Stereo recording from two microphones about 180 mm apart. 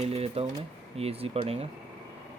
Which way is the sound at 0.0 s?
35° right (ahead or behind).